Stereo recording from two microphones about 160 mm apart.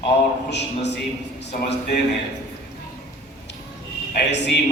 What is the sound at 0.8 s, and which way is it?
Speech, 90° left.